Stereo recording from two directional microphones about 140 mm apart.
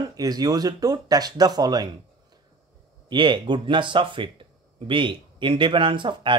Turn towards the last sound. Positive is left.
turn(degrees=-35)  # may be behind; listen again after turning